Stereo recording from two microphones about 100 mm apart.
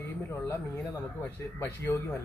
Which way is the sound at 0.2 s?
25° left (ahead or behind).